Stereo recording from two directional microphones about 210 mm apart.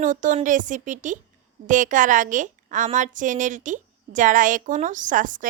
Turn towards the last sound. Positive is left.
turn(degrees=-40)  # may be behind; listen again after turning